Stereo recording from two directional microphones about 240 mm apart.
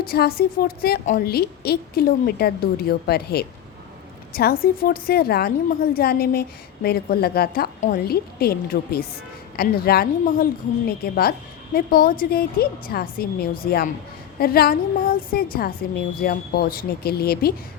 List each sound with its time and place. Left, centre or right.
0.1 s a woman's voice: left